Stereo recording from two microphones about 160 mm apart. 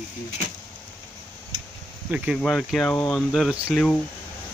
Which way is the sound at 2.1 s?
5° right (ahead or behind).